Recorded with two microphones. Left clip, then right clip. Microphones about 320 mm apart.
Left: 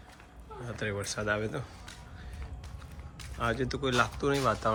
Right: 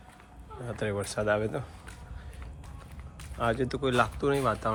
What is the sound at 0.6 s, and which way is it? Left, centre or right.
Speech, centre.